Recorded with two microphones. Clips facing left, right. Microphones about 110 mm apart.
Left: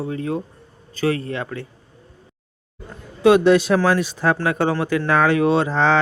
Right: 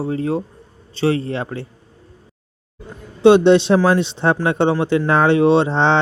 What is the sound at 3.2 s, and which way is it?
Speech, 30° right (ahead or behind).